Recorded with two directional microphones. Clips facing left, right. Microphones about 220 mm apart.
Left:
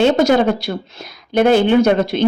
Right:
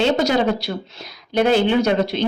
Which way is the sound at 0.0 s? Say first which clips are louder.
Left 5 dB; 50° left (ahead or behind).